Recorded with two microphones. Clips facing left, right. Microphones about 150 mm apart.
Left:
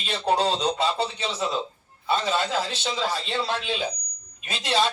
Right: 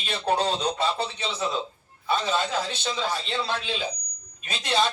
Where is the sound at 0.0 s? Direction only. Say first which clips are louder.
Left 2 dB; 10° left (ahead or behind).